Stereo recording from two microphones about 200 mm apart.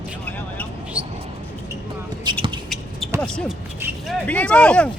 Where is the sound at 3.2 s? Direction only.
5° left (ahead or behind).